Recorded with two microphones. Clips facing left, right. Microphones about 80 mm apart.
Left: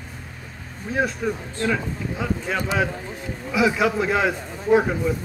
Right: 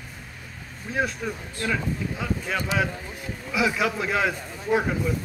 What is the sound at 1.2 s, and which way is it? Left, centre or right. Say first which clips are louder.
Speech: left 5 dB; centre.